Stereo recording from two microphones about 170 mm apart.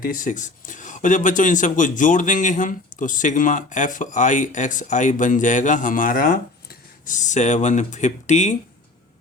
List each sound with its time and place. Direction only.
0.0 s speech: 55° left (ahead or behind)
7.0 s speech: 50° left (ahead or behind)